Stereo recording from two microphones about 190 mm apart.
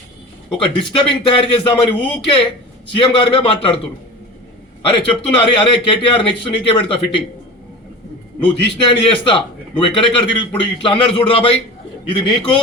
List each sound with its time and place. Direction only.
0.5 s a man's voice: 25° left (ahead or behind)
4.9 s a man's voice: 25° left (ahead or behind)
8.4 s a man's voice: 25° left (ahead or behind)